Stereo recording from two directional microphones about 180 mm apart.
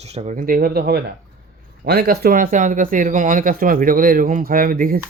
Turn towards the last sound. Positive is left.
turn(degrees=-50)  # may be behind; listen again after turning